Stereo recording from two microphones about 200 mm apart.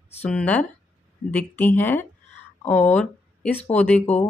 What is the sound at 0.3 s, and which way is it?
Speech, 5° left (ahead or behind).